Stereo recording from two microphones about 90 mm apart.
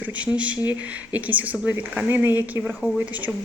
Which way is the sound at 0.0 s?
15° right (ahead or behind).